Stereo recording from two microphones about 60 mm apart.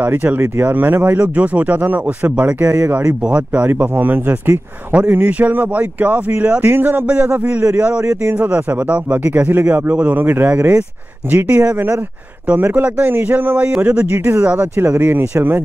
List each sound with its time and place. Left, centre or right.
0.0 s speech: right
8.0 s speech: right
8.3 s speech: right